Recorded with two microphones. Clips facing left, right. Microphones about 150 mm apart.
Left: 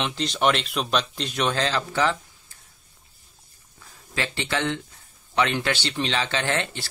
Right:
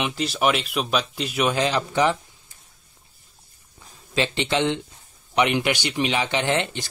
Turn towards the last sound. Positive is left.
turn(degrees=-20)  # may be behind; listen again after turning